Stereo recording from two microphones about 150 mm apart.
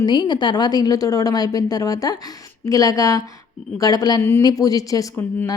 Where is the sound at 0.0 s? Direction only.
30° left (ahead or behind).